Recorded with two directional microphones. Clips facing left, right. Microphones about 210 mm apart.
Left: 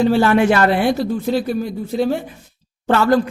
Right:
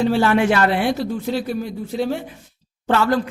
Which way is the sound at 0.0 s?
40° left (ahead or behind).